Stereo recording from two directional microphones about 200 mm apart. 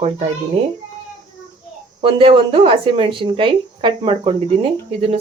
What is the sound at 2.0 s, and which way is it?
Speech, 25° right (ahead or behind).